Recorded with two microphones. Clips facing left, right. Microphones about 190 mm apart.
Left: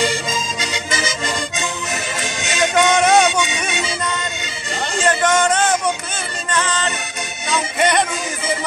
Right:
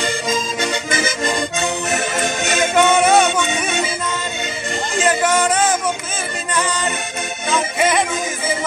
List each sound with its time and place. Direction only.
0.3 s accordion: 55° right (ahead or behind)
2.2 s music: 55° right (ahead or behind)
2.7 s music: 5° right (ahead or behind)
3.3 s music: 55° right (ahead or behind)
5.0 s a sound: 5° right (ahead or behind)
6.5 s music: 10° right (ahead or behind)